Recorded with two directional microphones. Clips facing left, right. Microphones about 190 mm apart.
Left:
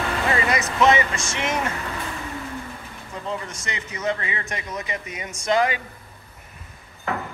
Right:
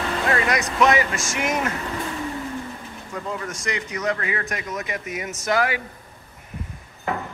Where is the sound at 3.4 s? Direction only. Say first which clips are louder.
Right 5 dB; centre (ahead or behind).